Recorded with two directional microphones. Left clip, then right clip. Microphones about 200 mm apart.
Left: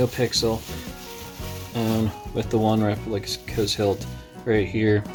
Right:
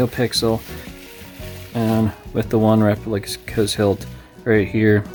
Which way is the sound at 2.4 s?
55° right (ahead or behind).